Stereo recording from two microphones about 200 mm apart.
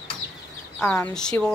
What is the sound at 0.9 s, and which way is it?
Speech, 5° left (ahead or behind).